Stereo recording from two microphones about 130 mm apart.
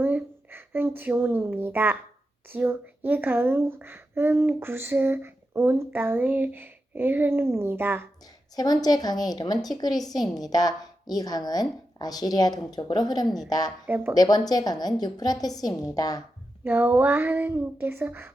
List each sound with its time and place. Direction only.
0.0 s a woman's voice: 15° right (ahead or behind)
8.5 s a woman's voice: 30° left (ahead or behind)
13.2 s a woman's voice: centre (ahead or behind)
13.5 s a woman's voice: 30° left (ahead or behind)
13.8 s speech: 15° right (ahead or behind)
14.1 s a woman's voice: 30° left (ahead or behind)
16.6 s speech: 15° right (ahead or behind)